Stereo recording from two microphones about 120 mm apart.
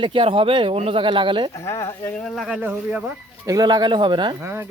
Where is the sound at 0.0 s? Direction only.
45° right (ahead or behind).